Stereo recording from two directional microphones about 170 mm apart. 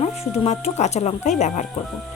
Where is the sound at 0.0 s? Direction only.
40° left (ahead or behind).